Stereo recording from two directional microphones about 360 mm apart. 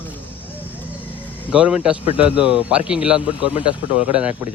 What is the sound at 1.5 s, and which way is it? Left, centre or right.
A man's voice, centre.